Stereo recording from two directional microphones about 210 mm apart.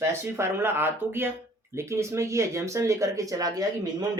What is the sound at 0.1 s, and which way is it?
Speech, 10° right (ahead or behind).